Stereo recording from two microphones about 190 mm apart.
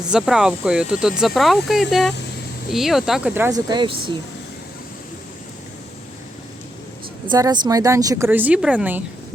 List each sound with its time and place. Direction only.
0.1 s speech: 5° right (ahead or behind)
3.7 s speech: 25° right (ahead or behind)
7.3 s speech: 20° right (ahead or behind)